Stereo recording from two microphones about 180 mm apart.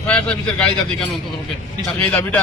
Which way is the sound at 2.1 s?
10° left (ahead or behind).